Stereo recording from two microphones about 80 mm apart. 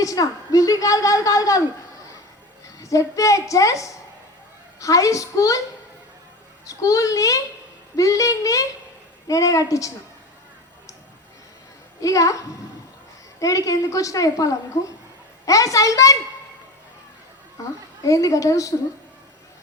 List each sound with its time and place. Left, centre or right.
0.0 s a woman's voice: left
2.7 s a woman's voice: left
6.7 s a woman's voice: left
11.9 s a woman's voice: left
18.0 s a woman's voice: left